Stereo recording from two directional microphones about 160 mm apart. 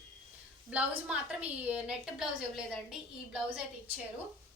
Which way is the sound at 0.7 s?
5° right (ahead or behind).